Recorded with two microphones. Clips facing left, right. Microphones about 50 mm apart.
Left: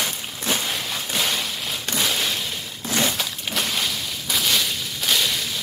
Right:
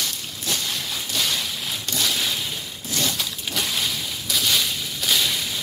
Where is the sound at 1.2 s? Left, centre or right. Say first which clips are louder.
Even; centre.